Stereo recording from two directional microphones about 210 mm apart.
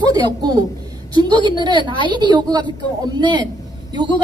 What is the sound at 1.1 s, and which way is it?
A woman's voice, 20° right (ahead or behind).